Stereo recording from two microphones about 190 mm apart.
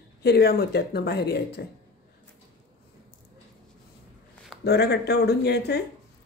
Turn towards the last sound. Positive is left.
turn(degrees=60)  # may be behind; listen again after turning